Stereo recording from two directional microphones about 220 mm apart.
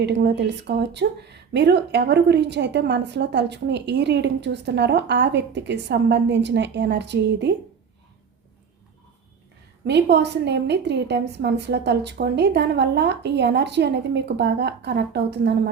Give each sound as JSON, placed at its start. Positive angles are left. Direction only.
{"t": 0.0, "sound": "speech", "side_deg": -50}
{"t": 9.8, "sound": "speech", "side_deg": -50}